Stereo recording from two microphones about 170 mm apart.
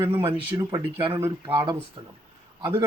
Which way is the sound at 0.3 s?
30° right (ahead or behind).